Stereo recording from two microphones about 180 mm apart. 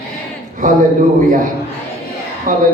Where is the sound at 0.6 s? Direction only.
45° right (ahead or behind).